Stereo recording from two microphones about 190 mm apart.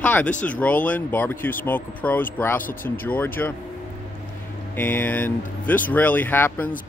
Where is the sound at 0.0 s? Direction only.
5° left (ahead or behind).